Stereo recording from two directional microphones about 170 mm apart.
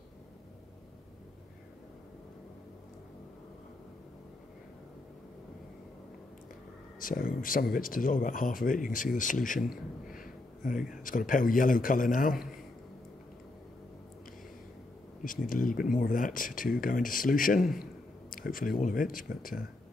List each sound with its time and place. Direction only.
7.0 s speech: 55° left (ahead or behind)
9.6 s a man's voice: centre (ahead or behind)
10.1 s a sound: 55° left (ahead or behind)
11.0 s speech: 55° left (ahead or behind)
15.4 s speech: 55° left (ahead or behind)